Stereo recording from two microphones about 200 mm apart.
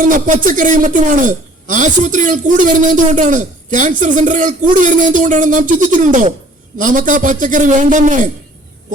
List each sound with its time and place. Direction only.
0.0 s a man's voice: 40° right (ahead or behind)